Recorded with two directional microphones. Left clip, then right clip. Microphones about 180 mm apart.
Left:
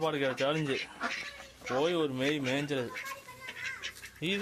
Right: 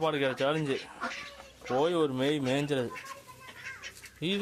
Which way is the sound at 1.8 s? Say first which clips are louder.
Right 2 dB; 15° right (ahead or behind).